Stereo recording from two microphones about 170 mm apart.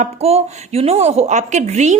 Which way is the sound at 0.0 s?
35° right (ahead or behind).